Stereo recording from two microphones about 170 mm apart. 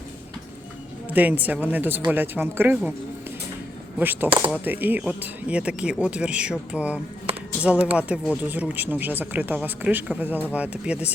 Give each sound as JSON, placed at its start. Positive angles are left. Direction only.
{"t": 1.1, "sound": "speech", "side_deg": -10}
{"t": 3.9, "sound": "speech", "side_deg": -10}